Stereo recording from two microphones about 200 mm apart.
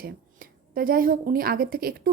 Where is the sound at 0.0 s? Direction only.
45° right (ahead or behind).